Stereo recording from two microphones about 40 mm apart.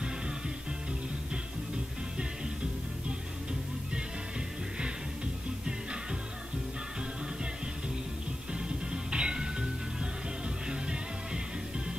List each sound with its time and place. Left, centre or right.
8.5 s music: right
10.7 s music: centre